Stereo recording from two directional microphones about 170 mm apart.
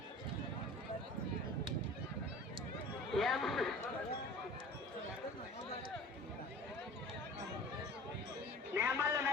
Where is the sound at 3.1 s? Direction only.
Centre (ahead or behind).